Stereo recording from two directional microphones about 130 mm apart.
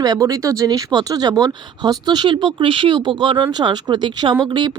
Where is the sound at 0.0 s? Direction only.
30° right (ahead or behind).